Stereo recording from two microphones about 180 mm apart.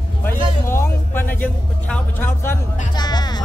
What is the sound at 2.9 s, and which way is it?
Music, 25° left (ahead or behind).